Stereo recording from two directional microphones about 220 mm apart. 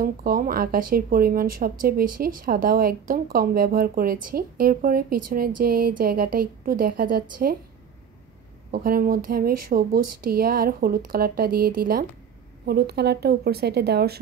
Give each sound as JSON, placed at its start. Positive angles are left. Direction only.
{"t": 0.0, "sound": "speech", "side_deg": -40}
{"t": 8.7, "sound": "speech", "side_deg": -40}